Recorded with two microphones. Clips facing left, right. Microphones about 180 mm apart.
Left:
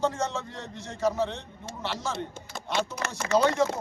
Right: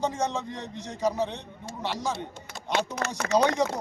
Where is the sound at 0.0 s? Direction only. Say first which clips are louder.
Even; 15° right (ahead or behind).